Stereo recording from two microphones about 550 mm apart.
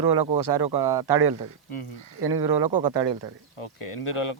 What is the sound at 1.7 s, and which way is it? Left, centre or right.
Speech, left.